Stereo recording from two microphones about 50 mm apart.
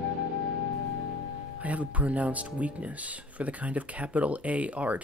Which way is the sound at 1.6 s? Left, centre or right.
Right.